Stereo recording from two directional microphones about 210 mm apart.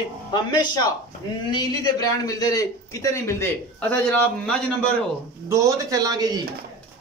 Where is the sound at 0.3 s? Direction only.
20° left (ahead or behind).